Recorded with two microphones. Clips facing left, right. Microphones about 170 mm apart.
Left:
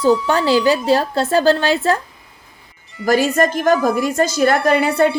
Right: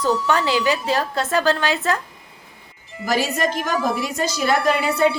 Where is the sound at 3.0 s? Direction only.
50° left (ahead or behind).